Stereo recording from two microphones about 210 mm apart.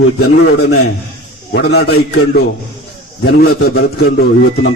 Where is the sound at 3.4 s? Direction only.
45° left (ahead or behind).